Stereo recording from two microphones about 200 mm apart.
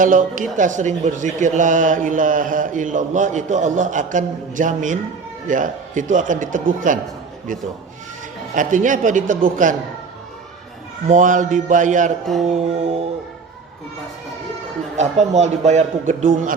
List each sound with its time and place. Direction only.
0.0 s speech: 40° right (ahead or behind)
8.5 s speech: 40° right (ahead or behind)
11.1 s speech: 40° right (ahead or behind)
12.2 s a sound: centre (ahead or behind)
12.5 s speech: 30° right (ahead or behind)
14.9 s speech: 35° right (ahead or behind)